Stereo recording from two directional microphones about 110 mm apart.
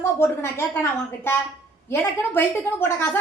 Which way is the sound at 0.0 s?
20° left (ahead or behind).